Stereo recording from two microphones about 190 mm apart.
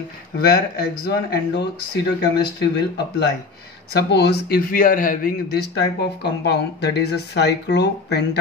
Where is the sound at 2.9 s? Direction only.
60° left (ahead or behind).